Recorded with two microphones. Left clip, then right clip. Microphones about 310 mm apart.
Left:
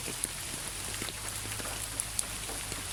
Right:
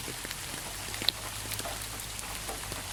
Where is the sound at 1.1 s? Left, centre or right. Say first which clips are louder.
Right 11 dB; right.